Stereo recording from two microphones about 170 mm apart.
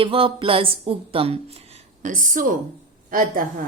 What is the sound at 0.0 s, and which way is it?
A woman's voice, 30° right (ahead or behind).